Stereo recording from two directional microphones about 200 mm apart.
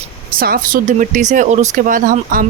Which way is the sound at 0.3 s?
50° right (ahead or behind).